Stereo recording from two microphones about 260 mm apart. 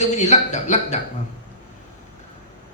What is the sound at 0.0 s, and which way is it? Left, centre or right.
Speech, left.